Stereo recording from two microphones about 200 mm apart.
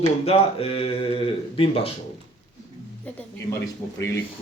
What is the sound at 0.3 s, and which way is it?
Speech, 30° left (ahead or behind).